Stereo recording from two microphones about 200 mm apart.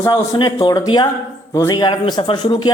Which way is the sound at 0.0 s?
15° left (ahead or behind).